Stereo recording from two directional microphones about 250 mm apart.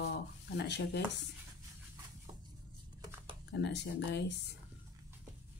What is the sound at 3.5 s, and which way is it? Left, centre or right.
Speech, left.